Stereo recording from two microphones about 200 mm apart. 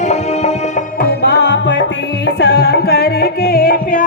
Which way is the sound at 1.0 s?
55° left (ahead or behind).